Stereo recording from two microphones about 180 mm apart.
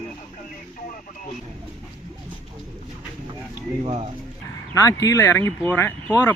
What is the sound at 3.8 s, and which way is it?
Speech, 30° right (ahead or behind).